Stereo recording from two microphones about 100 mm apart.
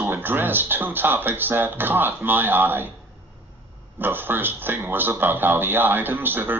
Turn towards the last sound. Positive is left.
turn(degrees=-20)  # may be behind; listen again after turning